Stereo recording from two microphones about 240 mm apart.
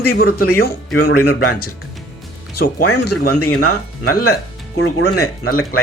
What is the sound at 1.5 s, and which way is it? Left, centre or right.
Speech, left.